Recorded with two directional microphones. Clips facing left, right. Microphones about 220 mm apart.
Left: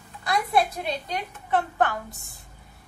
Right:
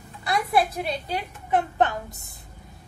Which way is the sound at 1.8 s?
20° right (ahead or behind).